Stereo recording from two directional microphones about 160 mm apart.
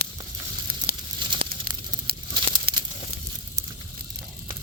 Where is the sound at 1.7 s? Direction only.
75° right (ahead or behind).